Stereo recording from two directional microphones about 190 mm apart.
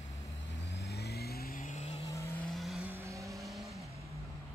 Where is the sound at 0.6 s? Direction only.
65° left (ahead or behind); by 2.0 s 40° left (ahead or behind).